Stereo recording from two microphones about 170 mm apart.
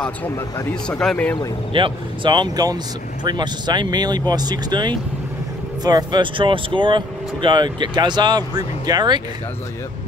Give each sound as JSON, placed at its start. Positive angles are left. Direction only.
{"t": 0.8, "sound": "speech", "side_deg": 5}
{"t": 1.7, "sound": "speech", "side_deg": -30}